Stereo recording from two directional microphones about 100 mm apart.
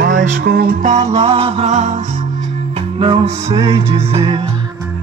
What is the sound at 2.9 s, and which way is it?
Music, 65° right (ahead or behind).